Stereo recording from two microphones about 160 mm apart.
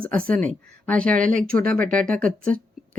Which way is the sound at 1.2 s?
55° right (ahead or behind).